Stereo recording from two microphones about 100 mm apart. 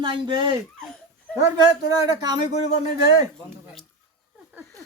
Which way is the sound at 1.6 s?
40° right (ahead or behind).